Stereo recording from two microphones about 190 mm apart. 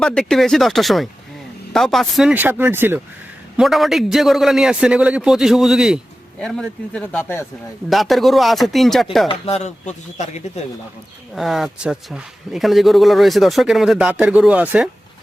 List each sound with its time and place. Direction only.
0.0 s a man's voice: 5° left (ahead or behind)
7.9 s a man's voice: centre (ahead or behind)
9.3 s speech: 35° left (ahead or behind)
11.3 s a man's voice: centre (ahead or behind)